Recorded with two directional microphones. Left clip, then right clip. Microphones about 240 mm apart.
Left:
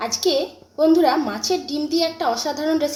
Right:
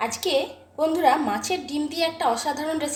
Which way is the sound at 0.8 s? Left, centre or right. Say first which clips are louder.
Left 4 dB; centre.